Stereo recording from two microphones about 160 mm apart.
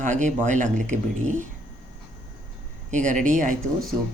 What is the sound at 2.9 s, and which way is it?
Speech, 50° right (ahead or behind).